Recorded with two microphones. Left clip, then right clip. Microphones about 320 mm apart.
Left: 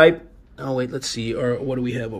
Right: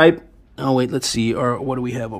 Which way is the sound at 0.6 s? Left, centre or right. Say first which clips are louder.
Right 6 dB; right.